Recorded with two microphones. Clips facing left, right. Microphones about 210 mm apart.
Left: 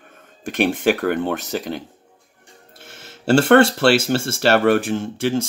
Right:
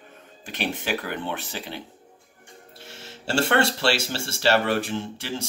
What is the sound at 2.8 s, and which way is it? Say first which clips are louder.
Speech: left 13 dB; 50° left (ahead or behind).